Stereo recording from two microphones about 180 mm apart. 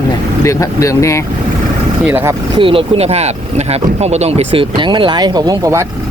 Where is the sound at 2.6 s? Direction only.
30° right (ahead or behind).